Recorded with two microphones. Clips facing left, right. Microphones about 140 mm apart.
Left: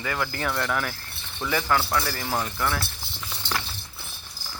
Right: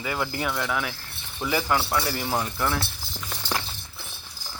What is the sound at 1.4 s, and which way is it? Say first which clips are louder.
Speech: even; 15° right (ahead or behind).